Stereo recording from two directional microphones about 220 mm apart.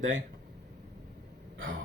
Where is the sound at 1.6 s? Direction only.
65° right (ahead or behind).